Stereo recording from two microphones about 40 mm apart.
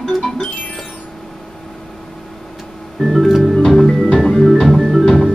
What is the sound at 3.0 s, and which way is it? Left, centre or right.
Music, centre.